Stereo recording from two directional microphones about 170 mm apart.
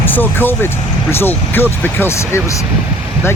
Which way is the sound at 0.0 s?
10° left (ahead or behind).